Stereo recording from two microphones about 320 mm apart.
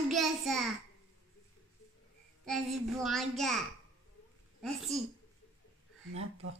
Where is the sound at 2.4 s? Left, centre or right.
Centre.